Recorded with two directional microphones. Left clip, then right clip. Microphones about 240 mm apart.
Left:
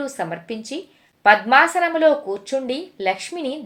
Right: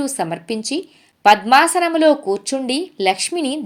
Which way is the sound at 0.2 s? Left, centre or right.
Right.